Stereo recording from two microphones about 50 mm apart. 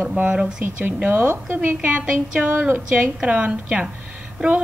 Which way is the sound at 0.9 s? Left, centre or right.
Right.